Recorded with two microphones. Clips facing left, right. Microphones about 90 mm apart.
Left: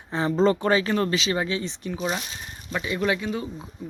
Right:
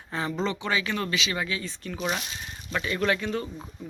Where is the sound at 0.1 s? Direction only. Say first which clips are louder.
Left 8 dB; 30° left (ahead or behind).